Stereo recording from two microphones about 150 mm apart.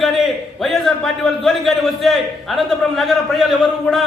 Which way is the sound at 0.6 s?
Centre (ahead or behind).